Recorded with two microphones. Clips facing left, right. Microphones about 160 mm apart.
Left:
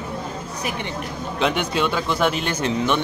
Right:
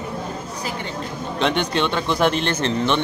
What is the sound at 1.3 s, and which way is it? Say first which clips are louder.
Speech: right 1 dB; 5° left (ahead or behind).